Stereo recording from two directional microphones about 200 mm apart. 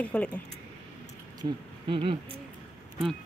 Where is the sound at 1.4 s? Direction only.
25° right (ahead or behind).